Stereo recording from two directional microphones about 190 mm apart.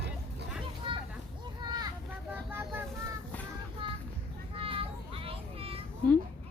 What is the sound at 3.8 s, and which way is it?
Vehicle, 25° right (ahead or behind).